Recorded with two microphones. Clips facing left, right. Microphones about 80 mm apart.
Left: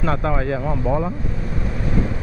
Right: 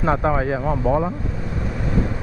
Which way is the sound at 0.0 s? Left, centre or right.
Centre.